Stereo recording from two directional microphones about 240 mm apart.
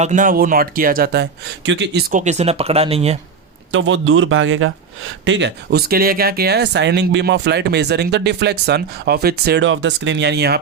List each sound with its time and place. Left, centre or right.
0.0 s speech: right
3.7 s speech: right